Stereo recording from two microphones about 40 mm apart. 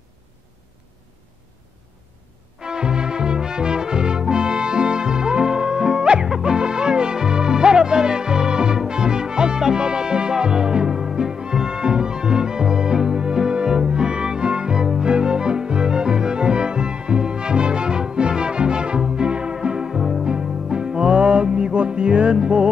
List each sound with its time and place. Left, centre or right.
2.6 s music: centre